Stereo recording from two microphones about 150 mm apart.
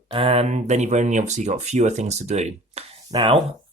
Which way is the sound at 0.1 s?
40° right (ahead or behind).